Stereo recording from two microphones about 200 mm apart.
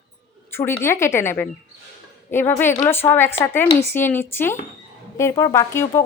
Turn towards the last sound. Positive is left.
turn(degrees=15)  # may be behind; listen again after turning